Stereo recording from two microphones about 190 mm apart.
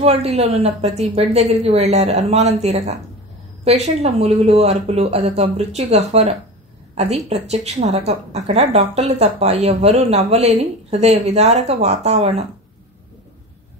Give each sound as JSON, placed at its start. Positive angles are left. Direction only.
{"t": 0.0, "sound": "a woman's voice", "side_deg": -35}